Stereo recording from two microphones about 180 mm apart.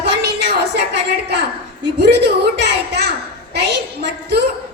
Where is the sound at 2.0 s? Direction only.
65° right (ahead or behind).